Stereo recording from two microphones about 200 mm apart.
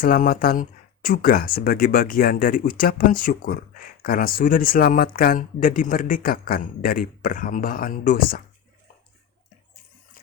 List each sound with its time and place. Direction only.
0.0 s speech: 45° left (ahead or behind)